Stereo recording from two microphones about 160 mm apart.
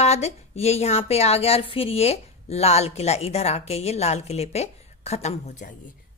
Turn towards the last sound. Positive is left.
turn(degrees=45)  # may be behind; listen again after turning